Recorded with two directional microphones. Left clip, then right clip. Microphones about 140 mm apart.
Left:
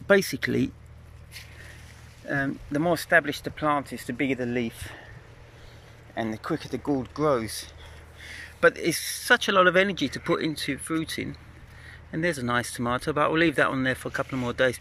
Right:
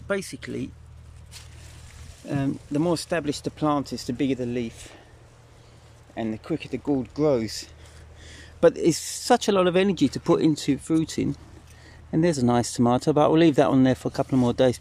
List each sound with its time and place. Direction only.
0.1 s speech: centre (ahead or behind)
2.2 s speech: 20° right (ahead or behind)
6.1 s speech: 25° right (ahead or behind); by 9.6 s 45° right (ahead or behind)
9.6 s speech: 30° right (ahead or behind)